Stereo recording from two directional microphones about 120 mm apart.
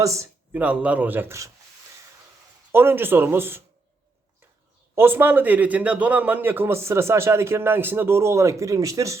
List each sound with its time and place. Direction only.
0.0 s a man's voice: 25° right (ahead or behind)
0.5 s speech: 10° right (ahead or behind)
2.7 s a man's voice: 20° right (ahead or behind)
4.9 s a man's voice: 20° right (ahead or behind)